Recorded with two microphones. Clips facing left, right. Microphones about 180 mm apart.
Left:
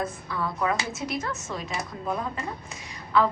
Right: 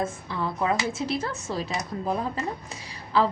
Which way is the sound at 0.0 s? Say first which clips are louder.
Right 1 dB; 25° right (ahead or behind).